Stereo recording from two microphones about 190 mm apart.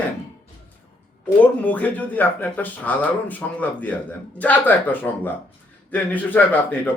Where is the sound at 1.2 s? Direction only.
10° left (ahead or behind).